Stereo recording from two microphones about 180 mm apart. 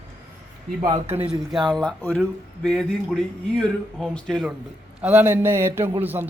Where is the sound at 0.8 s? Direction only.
35° right (ahead or behind).